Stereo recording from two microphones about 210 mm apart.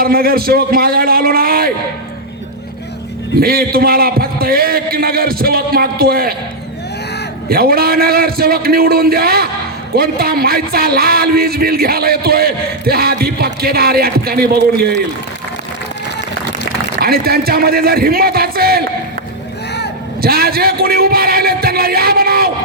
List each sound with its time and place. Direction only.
0.0 s speech: 45° right (ahead or behind)
3.4 s speech: 45° right (ahead or behind)
7.5 s speech: 45° right (ahead or behind)
17.0 s speech: 45° right (ahead or behind)
20.2 s a man's voice: 45° right (ahead or behind)